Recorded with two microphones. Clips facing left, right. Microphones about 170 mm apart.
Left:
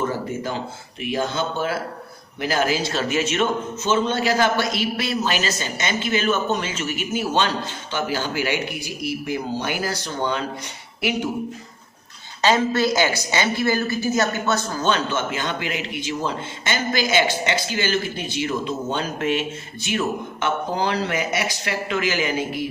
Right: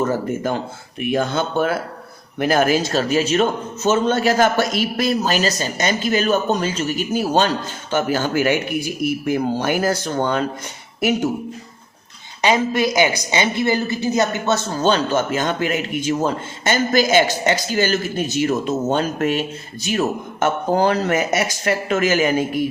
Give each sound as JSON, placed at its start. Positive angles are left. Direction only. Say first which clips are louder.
{"t": 0.0, "sound": "a woman's voice", "louder": "right 5 dB", "side_deg": -50}
{"t": 12.4, "sound": "a woman's voice", "louder": "right 1 dB", "side_deg": -15}